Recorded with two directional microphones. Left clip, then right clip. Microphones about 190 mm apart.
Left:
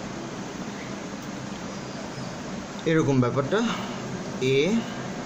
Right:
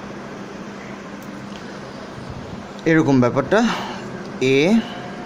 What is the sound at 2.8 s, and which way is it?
Speech, 45° right (ahead or behind).